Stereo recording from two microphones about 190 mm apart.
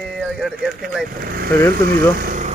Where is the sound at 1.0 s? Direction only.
50° right (ahead or behind).